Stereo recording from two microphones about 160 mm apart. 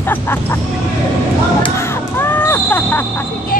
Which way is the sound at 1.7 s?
15° left (ahead or behind).